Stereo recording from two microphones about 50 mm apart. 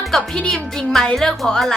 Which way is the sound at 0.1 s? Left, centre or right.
Centre.